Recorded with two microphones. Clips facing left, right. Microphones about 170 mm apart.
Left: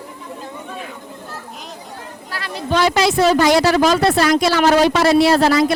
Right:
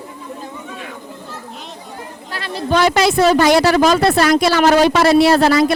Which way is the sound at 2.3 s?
25° right (ahead or behind).